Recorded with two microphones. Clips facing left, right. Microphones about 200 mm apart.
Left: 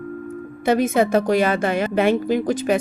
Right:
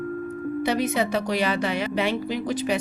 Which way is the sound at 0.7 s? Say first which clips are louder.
Left 8 dB; 50° left (ahead or behind).